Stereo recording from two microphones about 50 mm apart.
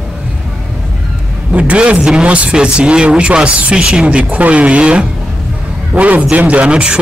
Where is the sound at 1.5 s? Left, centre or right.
Right.